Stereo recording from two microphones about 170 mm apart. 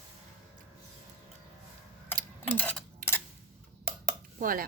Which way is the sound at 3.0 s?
50° right (ahead or behind).